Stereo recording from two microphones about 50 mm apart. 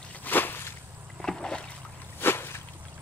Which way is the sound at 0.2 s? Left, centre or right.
Left.